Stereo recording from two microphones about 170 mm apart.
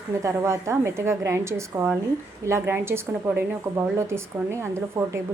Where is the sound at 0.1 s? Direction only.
15° right (ahead or behind).